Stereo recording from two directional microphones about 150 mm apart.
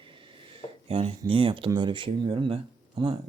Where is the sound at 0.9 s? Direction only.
35° right (ahead or behind).